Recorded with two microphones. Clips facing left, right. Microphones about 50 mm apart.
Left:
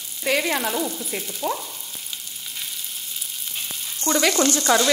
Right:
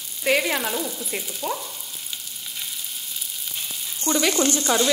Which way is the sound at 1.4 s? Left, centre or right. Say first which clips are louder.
Left 3 dB; centre.